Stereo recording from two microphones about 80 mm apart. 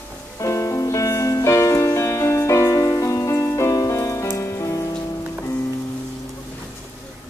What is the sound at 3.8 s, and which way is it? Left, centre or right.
Rain on surface, left.